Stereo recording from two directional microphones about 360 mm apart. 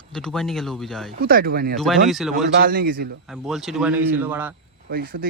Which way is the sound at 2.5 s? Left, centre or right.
Right.